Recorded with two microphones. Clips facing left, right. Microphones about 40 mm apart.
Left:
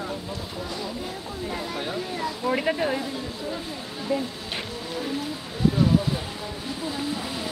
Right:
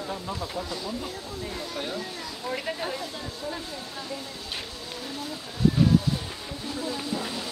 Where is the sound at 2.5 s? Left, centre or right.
Left.